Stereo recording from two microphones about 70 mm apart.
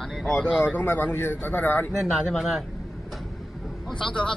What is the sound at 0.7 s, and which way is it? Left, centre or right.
Speech, left.